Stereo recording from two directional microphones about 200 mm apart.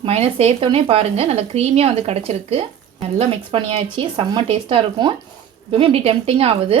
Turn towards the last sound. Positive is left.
turn(degrees=-30)  # may be behind; listen again after turning